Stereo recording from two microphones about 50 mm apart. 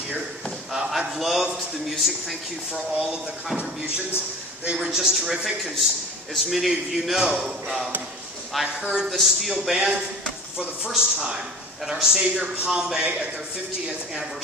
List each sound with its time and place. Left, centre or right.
0.7 s a man's voice: centre
4.8 s a man's voice: centre
8.5 s a man's voice: centre
11.0 s a man's voice: centre